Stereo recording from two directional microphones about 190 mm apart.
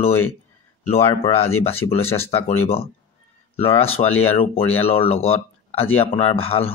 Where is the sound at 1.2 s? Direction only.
30° left (ahead or behind).